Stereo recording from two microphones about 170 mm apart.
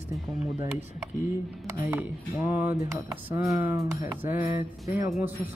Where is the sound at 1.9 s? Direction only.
10° right (ahead or behind).